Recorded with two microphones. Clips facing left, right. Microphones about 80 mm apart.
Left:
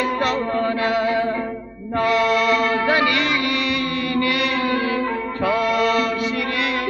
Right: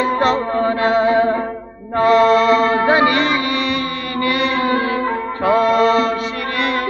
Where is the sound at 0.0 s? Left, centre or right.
Right.